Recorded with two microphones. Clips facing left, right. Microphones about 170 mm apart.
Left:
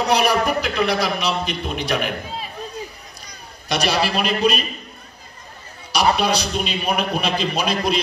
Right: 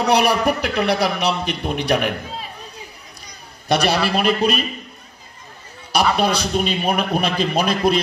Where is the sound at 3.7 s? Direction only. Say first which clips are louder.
Right 3 dB; 55° right (ahead or behind).